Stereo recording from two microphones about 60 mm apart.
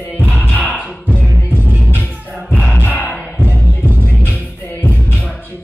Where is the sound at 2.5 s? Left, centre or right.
Left.